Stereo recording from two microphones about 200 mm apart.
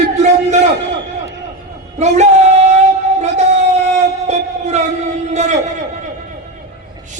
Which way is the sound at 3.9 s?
35° right (ahead or behind).